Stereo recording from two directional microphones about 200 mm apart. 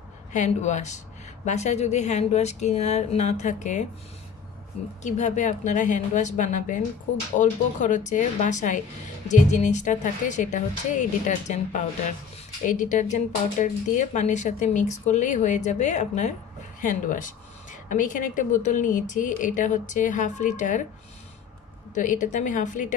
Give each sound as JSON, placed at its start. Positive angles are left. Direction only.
{"t": 0.3, "sound": "speech", "side_deg": 35}
{"t": 5.0, "sound": "speech", "side_deg": 35}
{"t": 21.9, "sound": "speech", "side_deg": 40}